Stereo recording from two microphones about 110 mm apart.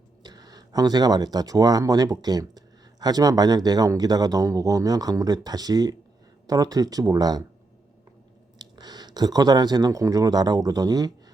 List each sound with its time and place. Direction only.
0.2 s speech: 40° right (ahead or behind)
8.5 s speech: 40° right (ahead or behind)